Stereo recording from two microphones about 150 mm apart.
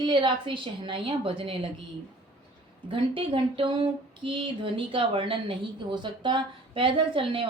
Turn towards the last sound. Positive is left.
turn(degrees=-35)  # may be behind; listen again after turning